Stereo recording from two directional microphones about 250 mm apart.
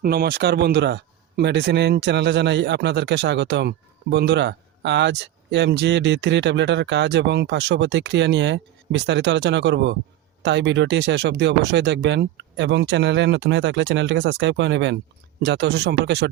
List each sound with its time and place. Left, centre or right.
0.0 s speech: right